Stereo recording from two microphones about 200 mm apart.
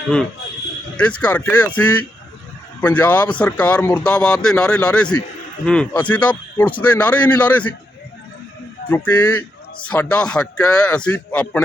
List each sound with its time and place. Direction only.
0.9 s a man's voice: 5° left (ahead or behind)
8.9 s a man's voice: 5° left (ahead or behind)